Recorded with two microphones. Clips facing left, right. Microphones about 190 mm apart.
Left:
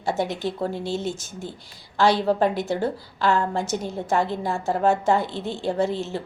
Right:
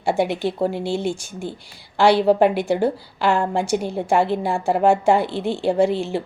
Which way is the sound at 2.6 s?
10° right (ahead or behind).